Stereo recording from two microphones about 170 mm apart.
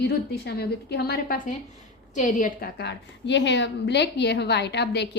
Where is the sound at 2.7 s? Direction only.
85° left.